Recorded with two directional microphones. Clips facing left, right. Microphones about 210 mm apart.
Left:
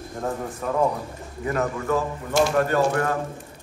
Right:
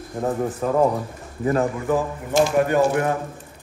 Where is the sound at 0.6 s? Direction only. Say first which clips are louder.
Right 4 dB; 35° right (ahead or behind).